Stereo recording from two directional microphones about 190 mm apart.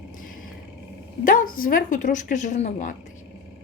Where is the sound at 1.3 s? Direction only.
45° left (ahead or behind).